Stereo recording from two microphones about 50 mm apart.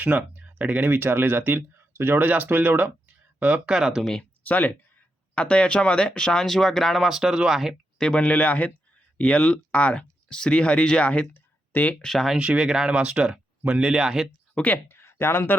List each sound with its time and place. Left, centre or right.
0.0 s speech: right
3.7 s speech: centre
4.2 s speech: left
5.3 s speech: left; by 7.8 s centre
7.9 s speech: centre
11.3 s a sound: left
12.0 s speech: centre
12.4 s speech: centre
13.9 s speech: centre
14.8 s speech: left